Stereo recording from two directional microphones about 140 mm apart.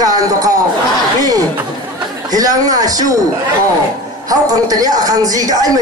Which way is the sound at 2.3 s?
25° right (ahead or behind).